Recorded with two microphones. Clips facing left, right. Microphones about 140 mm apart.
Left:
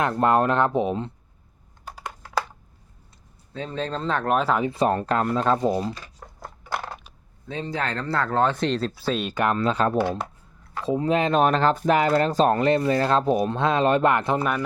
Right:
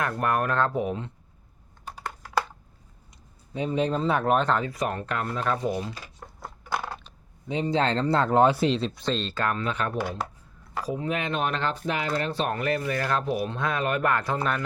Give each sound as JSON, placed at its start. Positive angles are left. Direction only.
{"t": 0.0, "sound": "speech", "side_deg": 25}
{"t": 3.5, "sound": "speech", "side_deg": -15}
{"t": 4.6, "sound": "speech", "side_deg": 30}
{"t": 6.1, "sound": "a sound", "side_deg": 0}
{"t": 7.4, "sound": "speech", "side_deg": -15}
{"t": 9.6, "sound": "speech", "side_deg": 35}